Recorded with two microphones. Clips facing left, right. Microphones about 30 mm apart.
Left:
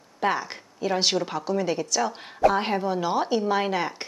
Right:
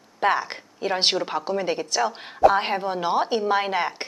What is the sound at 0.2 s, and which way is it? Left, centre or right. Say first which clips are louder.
A woman's voice: right 3 dB; right.